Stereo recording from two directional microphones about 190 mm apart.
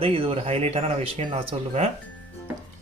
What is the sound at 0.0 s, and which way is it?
Speech, 30° right (ahead or behind).